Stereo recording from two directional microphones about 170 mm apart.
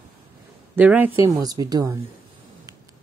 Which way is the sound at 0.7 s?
10° right (ahead or behind).